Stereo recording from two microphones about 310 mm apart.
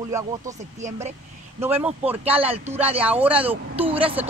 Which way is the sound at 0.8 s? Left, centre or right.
Right.